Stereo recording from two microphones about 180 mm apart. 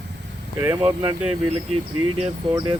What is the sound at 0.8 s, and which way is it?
Speech, 25° right (ahead or behind).